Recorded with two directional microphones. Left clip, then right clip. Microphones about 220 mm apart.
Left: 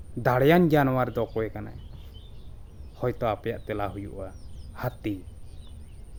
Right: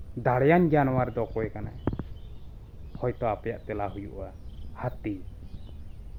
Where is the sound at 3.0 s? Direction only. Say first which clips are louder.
Left 1 dB; 20° left (ahead or behind).